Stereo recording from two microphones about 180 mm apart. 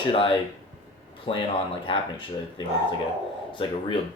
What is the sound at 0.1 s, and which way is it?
Speech, 30° left (ahead or behind).